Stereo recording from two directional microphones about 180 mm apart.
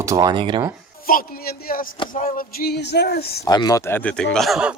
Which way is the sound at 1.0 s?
50° left (ahead or behind).